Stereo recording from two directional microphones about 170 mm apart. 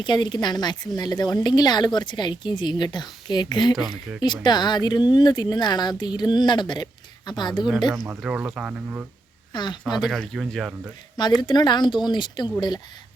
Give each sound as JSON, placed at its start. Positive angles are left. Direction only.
{"t": 0.0, "sound": "speech", "side_deg": 25}
{"t": 7.9, "sound": "speech", "side_deg": -15}
{"t": 9.5, "sound": "speech", "side_deg": 25}
{"t": 10.0, "sound": "speech", "side_deg": 0}
{"t": 11.3, "sound": "speech", "side_deg": 25}